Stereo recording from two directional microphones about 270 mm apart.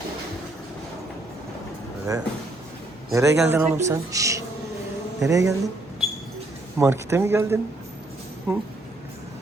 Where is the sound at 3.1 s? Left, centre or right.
Centre.